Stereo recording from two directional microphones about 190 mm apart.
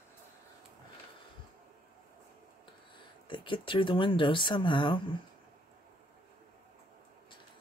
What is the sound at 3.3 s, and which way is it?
Speech, 25° left (ahead or behind).